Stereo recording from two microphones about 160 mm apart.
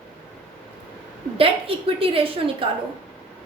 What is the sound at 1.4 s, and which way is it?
A woman's voice, 35° right (ahead or behind).